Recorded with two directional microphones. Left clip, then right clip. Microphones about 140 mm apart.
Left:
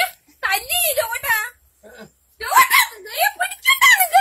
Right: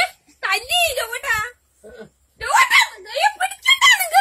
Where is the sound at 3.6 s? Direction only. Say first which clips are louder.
Left 1 dB; 15° right (ahead or behind).